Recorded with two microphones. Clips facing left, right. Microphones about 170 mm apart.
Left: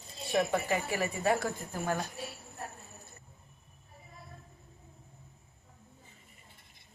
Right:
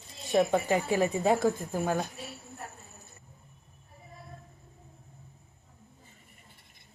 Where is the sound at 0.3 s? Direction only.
15° right (ahead or behind).